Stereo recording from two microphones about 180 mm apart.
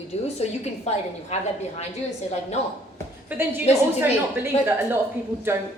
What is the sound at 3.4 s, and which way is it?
A woman's voice, 10° right (ahead or behind).